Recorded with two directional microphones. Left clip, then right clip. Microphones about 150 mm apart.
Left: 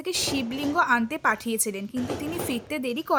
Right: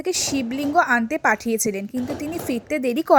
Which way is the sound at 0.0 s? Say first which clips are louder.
Right 4 dB; 25° right (ahead or behind).